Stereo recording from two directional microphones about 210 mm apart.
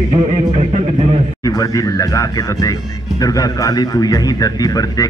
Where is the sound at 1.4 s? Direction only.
15° left (ahead or behind).